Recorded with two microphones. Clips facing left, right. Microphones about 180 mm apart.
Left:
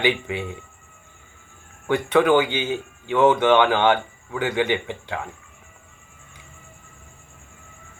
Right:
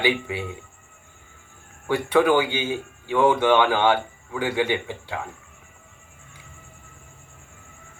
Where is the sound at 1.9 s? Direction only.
10° right (ahead or behind).